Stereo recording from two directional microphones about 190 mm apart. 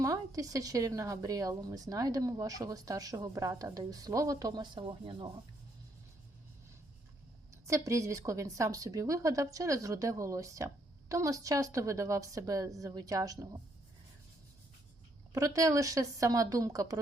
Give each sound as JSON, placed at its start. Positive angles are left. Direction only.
{"t": 0.0, "sound": "speech", "side_deg": -15}
{"t": 7.7, "sound": "a woman's voice", "side_deg": -15}
{"t": 15.3, "sound": "a woman's voice", "side_deg": -15}